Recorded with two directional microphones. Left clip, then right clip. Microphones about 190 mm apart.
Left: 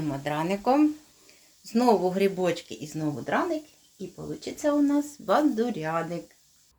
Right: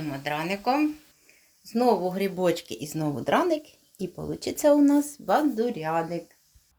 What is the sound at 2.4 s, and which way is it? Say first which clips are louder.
Speech: right 2 dB; 15° right (ahead or behind).